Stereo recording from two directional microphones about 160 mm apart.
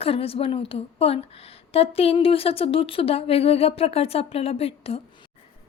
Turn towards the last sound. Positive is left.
turn(degrees=40)  # may be behind; listen again after turning